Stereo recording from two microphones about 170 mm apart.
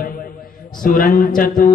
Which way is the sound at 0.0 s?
55° left (ahead or behind).